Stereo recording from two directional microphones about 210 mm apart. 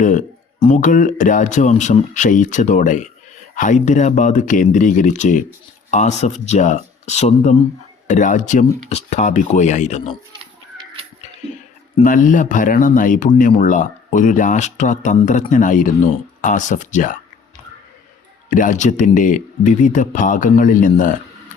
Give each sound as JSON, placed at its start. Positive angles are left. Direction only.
{"t": 0.0, "sound": "speech", "side_deg": 35}
{"t": 11.9, "sound": "speech", "side_deg": 40}
{"t": 18.5, "sound": "speech", "side_deg": 35}